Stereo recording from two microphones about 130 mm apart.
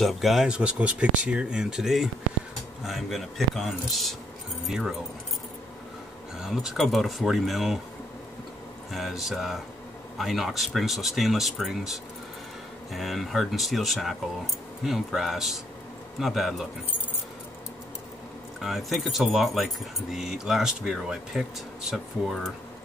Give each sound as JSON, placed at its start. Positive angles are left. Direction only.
{"t": 0.0, "sound": "speech", "side_deg": 0}
{"t": 6.3, "sound": "speech", "side_deg": -5}
{"t": 8.9, "sound": "speech", "side_deg": 0}
{"t": 18.6, "sound": "speech", "side_deg": 0}